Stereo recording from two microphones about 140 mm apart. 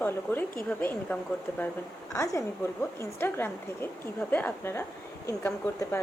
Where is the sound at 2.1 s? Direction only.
20° left (ahead or behind).